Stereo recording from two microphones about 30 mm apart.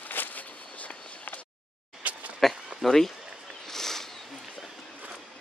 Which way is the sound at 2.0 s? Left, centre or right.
Right.